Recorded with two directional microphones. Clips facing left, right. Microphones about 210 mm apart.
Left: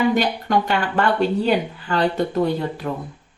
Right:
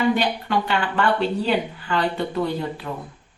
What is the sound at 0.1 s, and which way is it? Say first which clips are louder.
Speech: left 2 dB; 45° left (ahead or behind).